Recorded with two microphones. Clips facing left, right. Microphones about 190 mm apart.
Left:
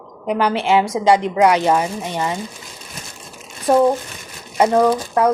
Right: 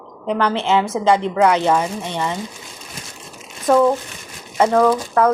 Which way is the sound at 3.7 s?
25° left (ahead or behind).